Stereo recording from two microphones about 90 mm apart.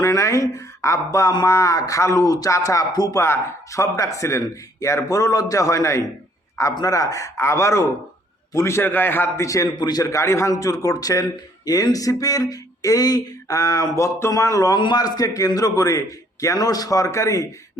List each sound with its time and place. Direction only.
0.0 s a man's voice: 35° left (ahead or behind)
3.2 s a man's voice: 30° left (ahead or behind)
9.3 s a man's voice: 35° left (ahead or behind)
9.7 s a man's voice: 50° left (ahead or behind)
10.1 s a man's voice: 35° left (ahead or behind)
14.8 s a man's voice: 55° left (ahead or behind); by 17.5 s 35° left (ahead or behind)